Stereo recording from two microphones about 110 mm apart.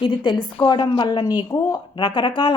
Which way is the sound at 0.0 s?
45° left (ahead or behind).